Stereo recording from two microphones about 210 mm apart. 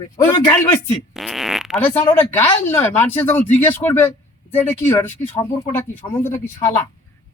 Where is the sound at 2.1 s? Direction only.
10° left (ahead or behind).